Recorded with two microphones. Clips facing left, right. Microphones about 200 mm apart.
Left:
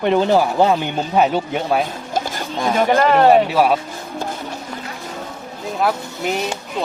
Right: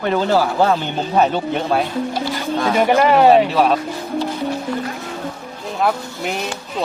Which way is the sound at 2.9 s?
10° right (ahead or behind).